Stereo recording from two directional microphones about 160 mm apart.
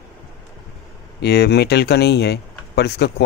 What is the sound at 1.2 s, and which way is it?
Speech, 90° left.